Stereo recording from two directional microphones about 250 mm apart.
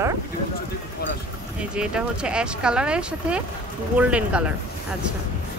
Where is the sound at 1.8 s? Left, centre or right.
Centre.